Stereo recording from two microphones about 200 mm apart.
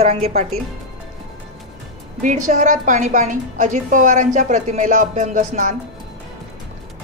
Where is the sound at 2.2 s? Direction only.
40° right (ahead or behind).